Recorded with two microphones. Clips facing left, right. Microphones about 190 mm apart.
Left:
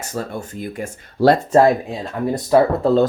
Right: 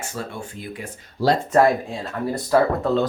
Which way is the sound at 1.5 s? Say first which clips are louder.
Left 3 dB; 20° left (ahead or behind).